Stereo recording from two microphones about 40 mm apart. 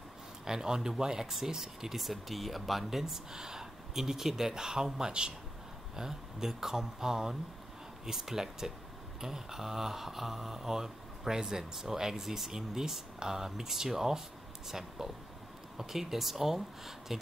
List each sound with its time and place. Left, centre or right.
0.5 s speech: centre